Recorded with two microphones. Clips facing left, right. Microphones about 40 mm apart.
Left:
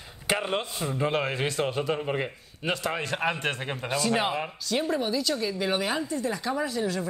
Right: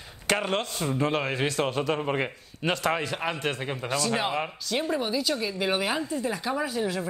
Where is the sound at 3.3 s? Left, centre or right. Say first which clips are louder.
Even; left.